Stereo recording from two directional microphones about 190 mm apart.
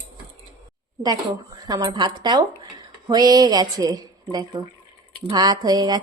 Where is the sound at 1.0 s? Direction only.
20° right (ahead or behind).